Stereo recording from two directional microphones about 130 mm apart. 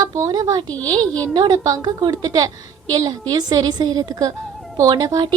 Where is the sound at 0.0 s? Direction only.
25° right (ahead or behind).